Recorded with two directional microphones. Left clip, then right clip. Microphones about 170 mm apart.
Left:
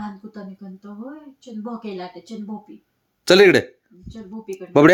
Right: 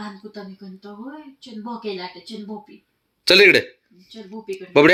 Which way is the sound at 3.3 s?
40° left (ahead or behind).